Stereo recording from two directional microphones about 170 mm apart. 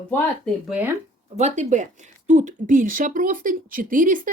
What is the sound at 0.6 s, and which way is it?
Speech, 10° right (ahead or behind).